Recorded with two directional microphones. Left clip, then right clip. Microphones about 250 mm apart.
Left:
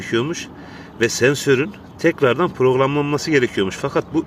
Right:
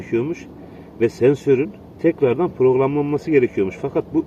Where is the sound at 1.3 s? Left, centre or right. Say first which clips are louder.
Even; centre.